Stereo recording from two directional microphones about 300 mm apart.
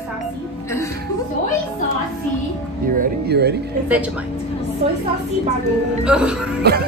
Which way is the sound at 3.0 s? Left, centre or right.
Right.